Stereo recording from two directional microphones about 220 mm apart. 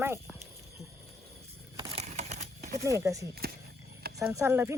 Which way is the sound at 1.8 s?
30° right (ahead or behind).